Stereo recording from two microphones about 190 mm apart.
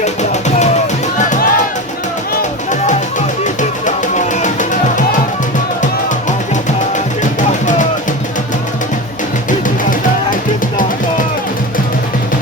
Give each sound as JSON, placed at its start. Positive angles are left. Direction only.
{"t": 0.0, "sound": "music", "side_deg": 35}
{"t": 2.6, "sound": "music", "side_deg": 40}